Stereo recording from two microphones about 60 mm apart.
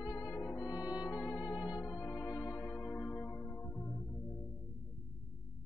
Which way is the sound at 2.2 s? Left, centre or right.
Left.